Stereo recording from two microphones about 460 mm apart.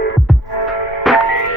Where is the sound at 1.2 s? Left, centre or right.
Left.